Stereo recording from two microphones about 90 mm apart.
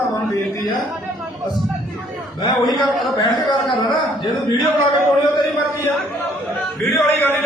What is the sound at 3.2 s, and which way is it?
A man's voice, 60° left (ahead or behind).